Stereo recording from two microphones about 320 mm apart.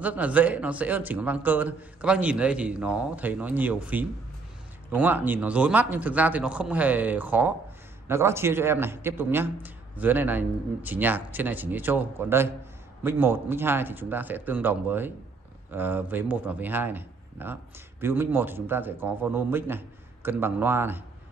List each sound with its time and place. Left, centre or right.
0.0 s a man's voice: centre